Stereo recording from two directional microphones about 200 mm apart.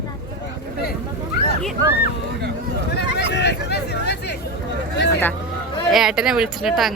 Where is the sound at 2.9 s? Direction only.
60° left (ahead or behind).